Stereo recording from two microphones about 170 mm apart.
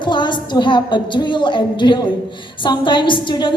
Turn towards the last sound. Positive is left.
turn(degrees=25)  # may be behind; listen again after turning